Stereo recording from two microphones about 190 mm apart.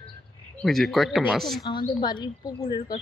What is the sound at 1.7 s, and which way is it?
A woman's voice, 20° left (ahead or behind).